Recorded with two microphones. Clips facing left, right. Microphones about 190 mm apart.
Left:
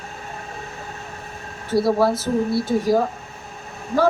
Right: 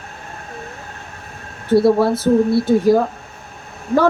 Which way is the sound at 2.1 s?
60° right (ahead or behind).